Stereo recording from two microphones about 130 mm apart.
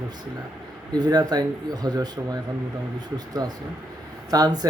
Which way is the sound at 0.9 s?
30° right (ahead or behind).